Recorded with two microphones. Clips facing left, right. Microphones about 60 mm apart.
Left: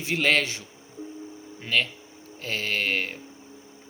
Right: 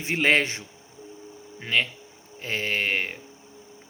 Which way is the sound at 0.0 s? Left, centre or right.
Right.